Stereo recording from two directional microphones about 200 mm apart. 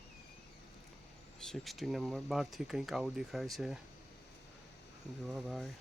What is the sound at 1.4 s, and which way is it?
Speech, centre (ahead or behind).